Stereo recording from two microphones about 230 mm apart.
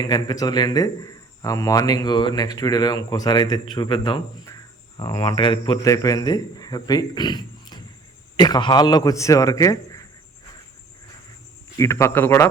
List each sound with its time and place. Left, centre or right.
0.0 s a man's voice: centre
11.8 s a man's voice: centre